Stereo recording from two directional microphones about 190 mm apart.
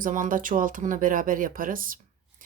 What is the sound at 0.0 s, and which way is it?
Speech, 45° right (ahead or behind).